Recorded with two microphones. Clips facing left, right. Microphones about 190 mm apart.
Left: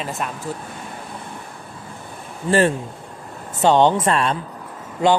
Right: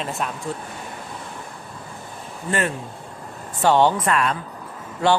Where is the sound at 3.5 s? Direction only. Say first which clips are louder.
Left 2 dB; 20° left (ahead or behind).